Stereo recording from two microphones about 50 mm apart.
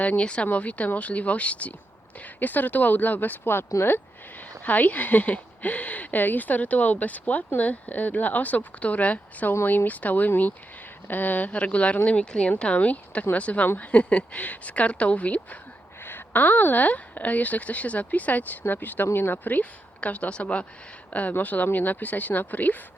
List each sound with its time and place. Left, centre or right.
0.2 s speech: left
16.0 s speech: left
20.0 s speech: left